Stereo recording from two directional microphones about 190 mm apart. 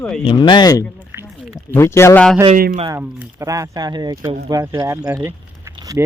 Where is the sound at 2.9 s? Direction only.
10° right (ahead or behind).